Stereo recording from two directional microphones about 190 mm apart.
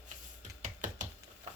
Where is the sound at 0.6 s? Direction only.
40° right (ahead or behind).